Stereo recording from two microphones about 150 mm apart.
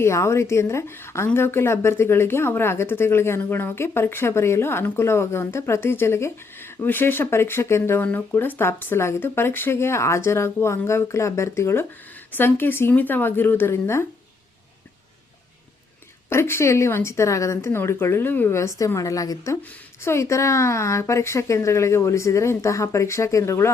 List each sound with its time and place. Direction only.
0.0 s a woman's voice: 20° left (ahead or behind)
16.3 s a woman's voice: 15° left (ahead or behind)